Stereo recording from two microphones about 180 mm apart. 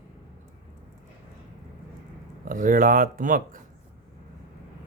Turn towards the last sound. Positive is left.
turn(degrees=-50)  # may be behind; listen again after turning